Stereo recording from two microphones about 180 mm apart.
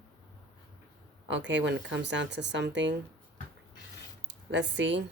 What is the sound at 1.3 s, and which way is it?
Speech, 90° right.